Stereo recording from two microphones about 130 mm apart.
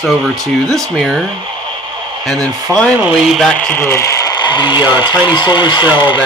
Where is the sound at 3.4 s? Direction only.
10° left (ahead or behind); by 6.2 s 35° left (ahead or behind).